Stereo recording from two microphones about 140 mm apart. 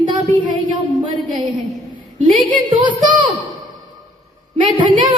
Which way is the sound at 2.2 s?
35° right (ahead or behind).